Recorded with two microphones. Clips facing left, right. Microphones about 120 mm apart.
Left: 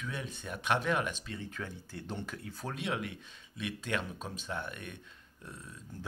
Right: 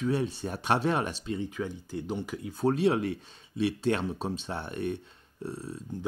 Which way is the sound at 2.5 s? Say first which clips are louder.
Right 12 dB; 35° right (ahead or behind).